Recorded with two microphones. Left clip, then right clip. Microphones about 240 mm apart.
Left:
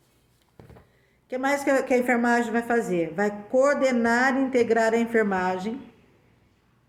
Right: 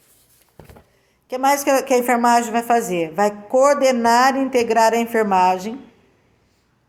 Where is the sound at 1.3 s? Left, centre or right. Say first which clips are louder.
Right 7 dB; centre.